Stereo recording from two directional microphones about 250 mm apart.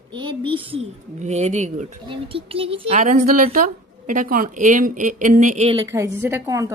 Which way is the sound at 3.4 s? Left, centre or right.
Right.